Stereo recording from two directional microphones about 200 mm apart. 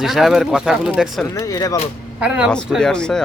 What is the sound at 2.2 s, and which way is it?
Speech, 5° right (ahead or behind).